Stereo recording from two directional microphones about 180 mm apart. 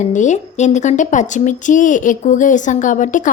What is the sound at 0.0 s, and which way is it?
A woman's voice, 40° left (ahead or behind).